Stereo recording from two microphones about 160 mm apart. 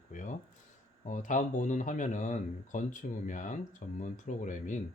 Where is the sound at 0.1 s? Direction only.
50° left (ahead or behind).